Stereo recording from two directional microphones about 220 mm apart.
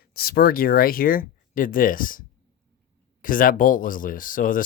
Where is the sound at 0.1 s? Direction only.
45° left (ahead or behind).